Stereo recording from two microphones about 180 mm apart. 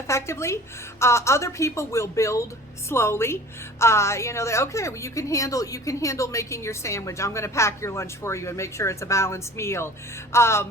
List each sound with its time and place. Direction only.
0.1 s a woman's voice: 15° left (ahead or behind)